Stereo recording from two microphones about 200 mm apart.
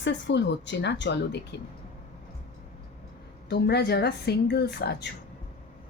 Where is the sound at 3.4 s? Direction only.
55° left (ahead or behind).